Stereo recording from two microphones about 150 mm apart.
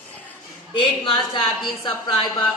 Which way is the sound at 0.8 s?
35° left (ahead or behind).